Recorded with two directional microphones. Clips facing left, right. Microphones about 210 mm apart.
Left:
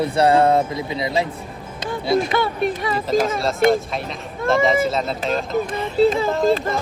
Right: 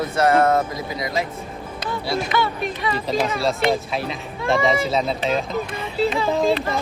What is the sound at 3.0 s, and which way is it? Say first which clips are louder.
Speech: left 3 dB; centre (ahead or behind).